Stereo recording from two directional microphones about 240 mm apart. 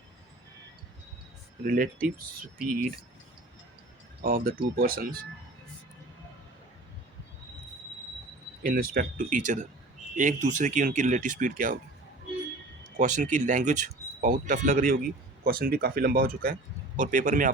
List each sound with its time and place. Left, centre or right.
1.6 s speech: right
4.2 s speech: right
8.6 s speech: right
13.0 s speech: right